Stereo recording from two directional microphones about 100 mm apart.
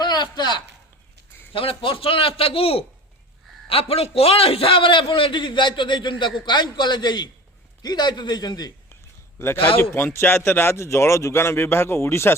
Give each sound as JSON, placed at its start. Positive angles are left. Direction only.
{"t": 0.0, "sound": "a sound", "side_deg": 45}
{"t": 1.5, "sound": "a man's voice", "side_deg": 65}
{"t": 9.9, "sound": "speech", "side_deg": 25}